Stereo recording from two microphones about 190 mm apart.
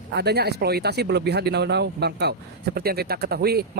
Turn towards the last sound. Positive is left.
turn(degrees=-55)  # may be behind; listen again after turning